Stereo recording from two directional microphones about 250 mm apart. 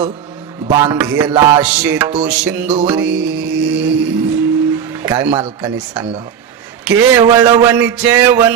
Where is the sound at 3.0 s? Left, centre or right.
Right.